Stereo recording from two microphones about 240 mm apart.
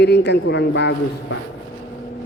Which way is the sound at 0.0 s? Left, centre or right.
Left.